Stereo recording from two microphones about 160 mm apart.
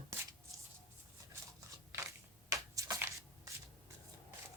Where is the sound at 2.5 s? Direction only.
20° right (ahead or behind).